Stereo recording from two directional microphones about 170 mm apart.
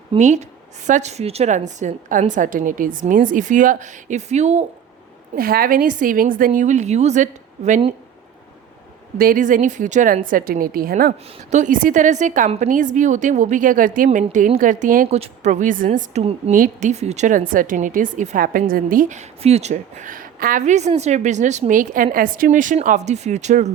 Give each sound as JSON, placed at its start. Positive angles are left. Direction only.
{"t": 0.2, "sound": "a woman's voice", "side_deg": -45}
{"t": 5.4, "sound": "a woman's voice", "side_deg": -60}
{"t": 9.1, "sound": "a woman's voice", "side_deg": -55}
{"t": 11.5, "sound": "a woman's voice", "side_deg": -50}
{"t": 15.9, "sound": "a woman's voice", "side_deg": -40}